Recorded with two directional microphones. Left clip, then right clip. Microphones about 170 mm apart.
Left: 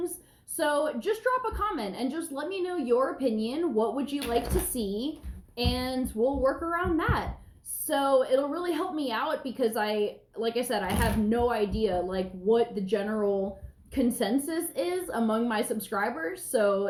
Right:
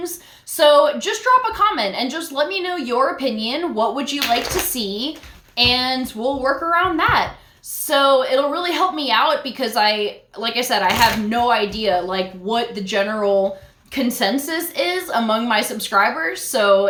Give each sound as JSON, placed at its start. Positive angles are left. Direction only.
{"t": 0.5, "sound": "a woman's voice", "side_deg": -20}